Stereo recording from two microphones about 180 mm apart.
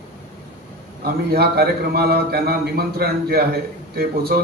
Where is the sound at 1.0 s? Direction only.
60° right (ahead or behind).